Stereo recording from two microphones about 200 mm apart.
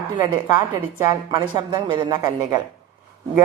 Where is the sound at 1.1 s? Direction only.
20° right (ahead or behind).